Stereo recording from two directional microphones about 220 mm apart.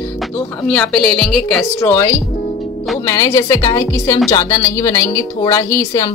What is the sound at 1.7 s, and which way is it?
Speech, 15° left (ahead or behind).